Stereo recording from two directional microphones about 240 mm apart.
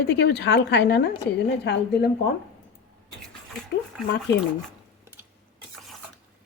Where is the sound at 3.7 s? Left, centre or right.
Left.